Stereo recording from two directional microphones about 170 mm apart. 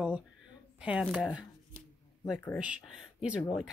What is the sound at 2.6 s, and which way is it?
Speech, 5° right (ahead or behind).